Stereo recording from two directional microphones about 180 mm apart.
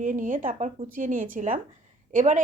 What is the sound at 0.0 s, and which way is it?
A woman's voice, 45° right (ahead or behind).